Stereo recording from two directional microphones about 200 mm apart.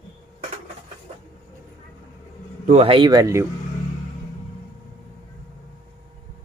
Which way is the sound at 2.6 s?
30° right (ahead or behind).